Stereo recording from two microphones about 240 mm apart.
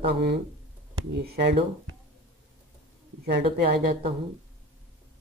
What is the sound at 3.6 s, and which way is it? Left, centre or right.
Speech, right.